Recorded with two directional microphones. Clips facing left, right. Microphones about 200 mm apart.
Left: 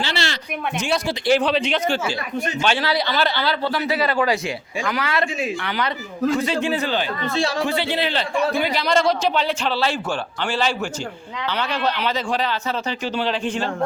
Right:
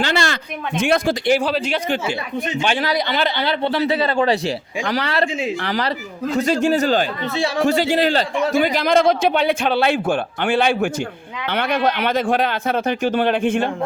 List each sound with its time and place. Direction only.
0.0 s a sound: 50° right (ahead or behind)
0.8 s a man's voice: 55° right (ahead or behind)
1.3 s speech: 5° right (ahead or behind)
2.6 s a man's voice: 15° right (ahead or behind); by 13.7 s 55° right (ahead or behind)